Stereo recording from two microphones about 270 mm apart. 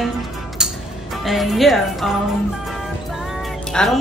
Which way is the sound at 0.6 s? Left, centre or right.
Centre.